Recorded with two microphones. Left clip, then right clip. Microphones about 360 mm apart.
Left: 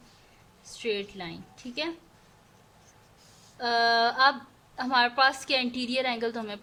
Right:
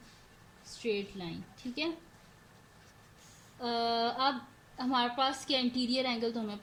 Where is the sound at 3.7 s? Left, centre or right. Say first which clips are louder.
Left 8 dB; left.